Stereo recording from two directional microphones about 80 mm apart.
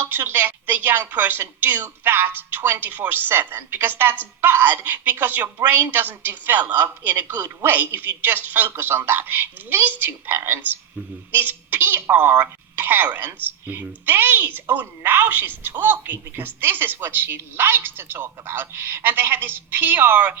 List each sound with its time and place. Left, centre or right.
0.0 s speech: right